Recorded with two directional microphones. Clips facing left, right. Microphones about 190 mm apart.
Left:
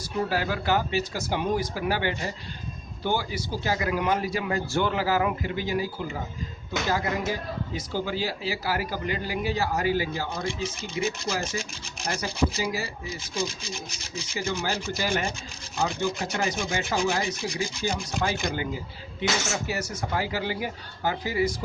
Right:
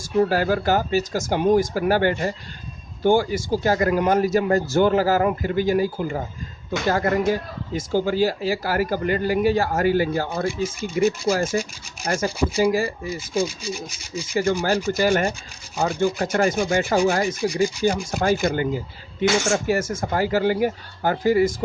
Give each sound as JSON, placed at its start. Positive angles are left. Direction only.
{"t": 0.3, "sound": "speech", "side_deg": -45}